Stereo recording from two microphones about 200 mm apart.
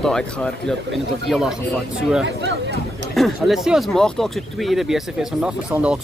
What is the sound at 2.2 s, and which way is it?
Speech, 65° right (ahead or behind).